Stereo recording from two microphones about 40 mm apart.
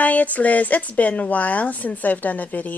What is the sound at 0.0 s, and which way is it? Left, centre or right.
Speech, left.